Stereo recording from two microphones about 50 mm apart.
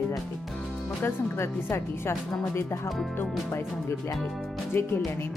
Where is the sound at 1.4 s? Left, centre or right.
Left.